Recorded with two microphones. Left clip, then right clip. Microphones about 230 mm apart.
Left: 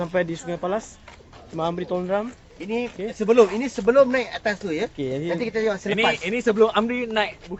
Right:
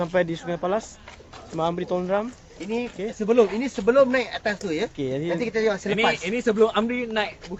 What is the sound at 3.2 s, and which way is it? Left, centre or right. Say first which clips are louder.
Speech: left 3 dB; centre.